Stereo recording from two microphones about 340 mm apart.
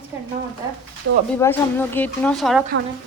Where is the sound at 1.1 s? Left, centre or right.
Right.